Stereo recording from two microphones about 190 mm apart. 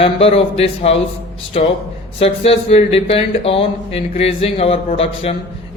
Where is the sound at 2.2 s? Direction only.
30° left (ahead or behind).